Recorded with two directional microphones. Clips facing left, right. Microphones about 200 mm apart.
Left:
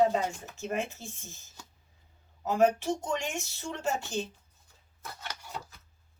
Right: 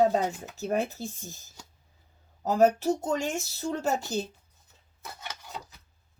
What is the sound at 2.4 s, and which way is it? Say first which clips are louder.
Speech: right 3 dB; 40° right (ahead or behind).